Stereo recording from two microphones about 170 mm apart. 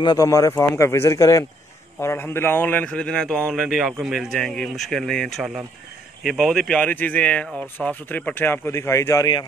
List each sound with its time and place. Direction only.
0.0 s speech: 20° left (ahead or behind)